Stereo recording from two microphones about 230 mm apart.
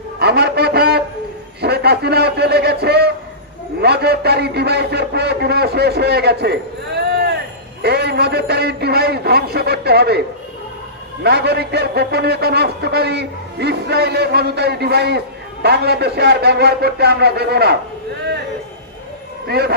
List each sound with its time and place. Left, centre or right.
0.2 s a sound: right
3.8 s a man's voice: right
19.5 s a man's voice: right